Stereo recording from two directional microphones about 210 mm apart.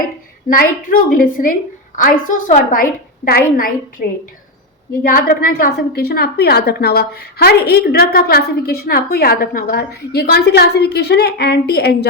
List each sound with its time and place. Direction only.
0.5 s a woman's voice: 40° left (ahead or behind)
5.0 s a woman's voice: 45° left (ahead or behind)